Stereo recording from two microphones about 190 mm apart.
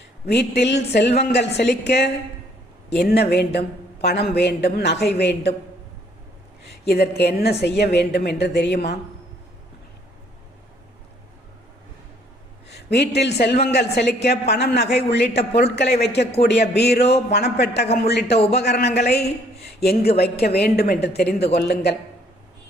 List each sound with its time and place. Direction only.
0.3 s a woman's voice: 60° left (ahead or behind)
6.8 s a woman's voice: 60° left (ahead or behind)
12.6 s a man's voice: 60° left (ahead or behind)